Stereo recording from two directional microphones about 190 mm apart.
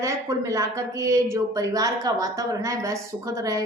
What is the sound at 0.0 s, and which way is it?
A woman's voice, 15° right (ahead or behind).